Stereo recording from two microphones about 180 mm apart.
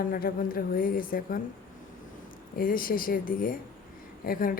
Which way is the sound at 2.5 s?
50° left (ahead or behind).